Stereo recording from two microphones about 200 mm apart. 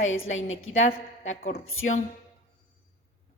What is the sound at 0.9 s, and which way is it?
Speech, 35° left (ahead or behind).